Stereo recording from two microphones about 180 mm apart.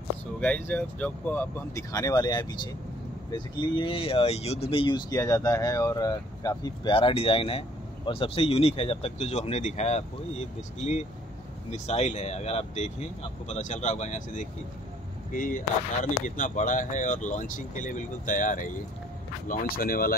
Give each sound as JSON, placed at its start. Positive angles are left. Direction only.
{"t": 0.4, "sound": "speech", "side_deg": 10}
{"t": 11.7, "sound": "speech", "side_deg": 40}